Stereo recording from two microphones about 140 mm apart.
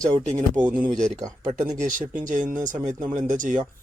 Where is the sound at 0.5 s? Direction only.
10° right (ahead or behind).